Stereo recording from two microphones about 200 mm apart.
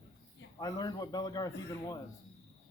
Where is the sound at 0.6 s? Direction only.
15° left (ahead or behind).